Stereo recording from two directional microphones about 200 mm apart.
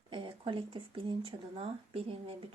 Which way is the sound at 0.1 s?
25° right (ahead or behind).